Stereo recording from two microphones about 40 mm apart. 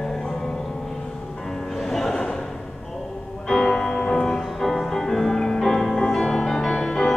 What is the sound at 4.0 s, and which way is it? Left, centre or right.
Music, centre.